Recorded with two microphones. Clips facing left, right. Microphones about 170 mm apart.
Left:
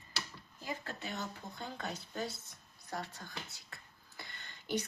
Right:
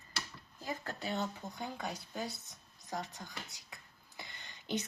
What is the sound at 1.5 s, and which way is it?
A woman's voice, 10° right (ahead or behind).